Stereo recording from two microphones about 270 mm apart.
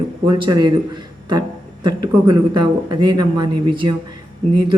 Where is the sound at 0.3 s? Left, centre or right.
Centre.